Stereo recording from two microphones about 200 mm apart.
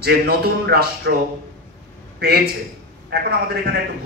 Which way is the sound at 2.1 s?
50° right (ahead or behind).